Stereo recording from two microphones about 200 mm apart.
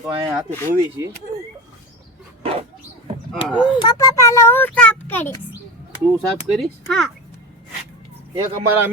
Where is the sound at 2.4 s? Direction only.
30° right (ahead or behind).